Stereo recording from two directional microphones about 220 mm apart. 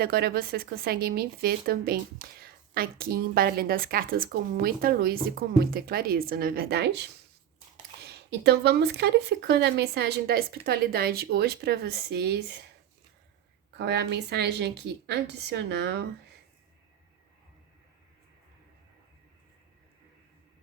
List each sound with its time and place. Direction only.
0.0 s speech: 45° right (ahead or behind)
8.0 s speech: 50° right (ahead or behind)
13.7 s speech: 50° right (ahead or behind)